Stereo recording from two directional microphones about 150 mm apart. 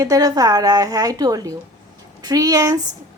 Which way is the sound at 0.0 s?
25° right (ahead or behind).